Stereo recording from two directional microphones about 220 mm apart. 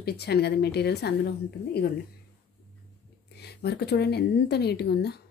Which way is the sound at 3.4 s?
45° left (ahead or behind).